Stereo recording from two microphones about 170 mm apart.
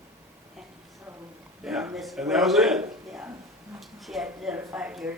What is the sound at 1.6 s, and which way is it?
A man's voice, 5° right (ahead or behind).